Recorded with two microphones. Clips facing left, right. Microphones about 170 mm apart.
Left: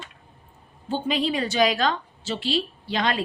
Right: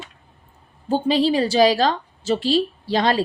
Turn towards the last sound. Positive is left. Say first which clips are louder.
# right 6 dB
turn(degrees=-35)  # may be behind; listen again after turning